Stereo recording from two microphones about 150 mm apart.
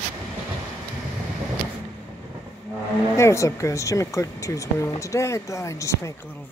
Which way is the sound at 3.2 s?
20° left (ahead or behind).